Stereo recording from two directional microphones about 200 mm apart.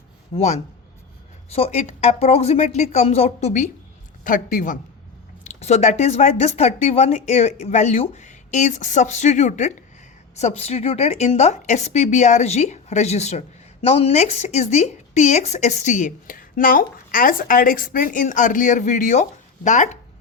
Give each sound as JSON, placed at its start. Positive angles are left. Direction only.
{"t": 0.3, "sound": "speech", "side_deg": 35}